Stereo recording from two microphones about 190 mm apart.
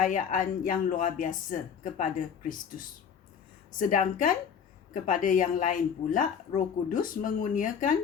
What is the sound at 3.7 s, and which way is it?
Speech, 45° left (ahead or behind).